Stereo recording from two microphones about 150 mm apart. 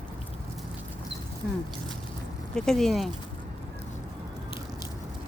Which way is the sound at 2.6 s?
5° left (ahead or behind).